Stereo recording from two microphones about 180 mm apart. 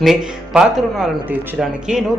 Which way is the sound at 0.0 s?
Centre (ahead or behind).